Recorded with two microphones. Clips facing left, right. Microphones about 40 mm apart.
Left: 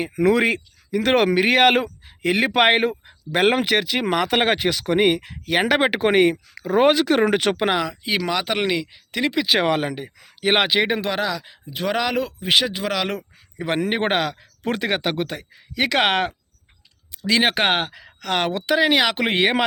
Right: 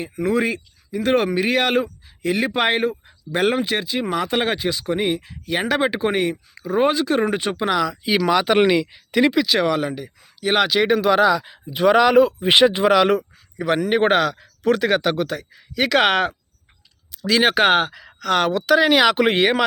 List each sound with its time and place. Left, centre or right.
0.0 s speech: left
8.0 s speech: centre
9.5 s speech: left
10.8 s speech: centre
11.0 s speech: centre
13.6 s speech: centre